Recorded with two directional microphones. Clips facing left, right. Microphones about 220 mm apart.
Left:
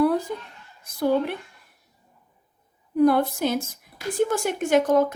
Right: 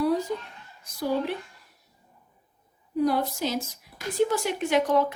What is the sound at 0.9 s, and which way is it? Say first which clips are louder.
Speech: left 5 dB; 55° left (ahead or behind).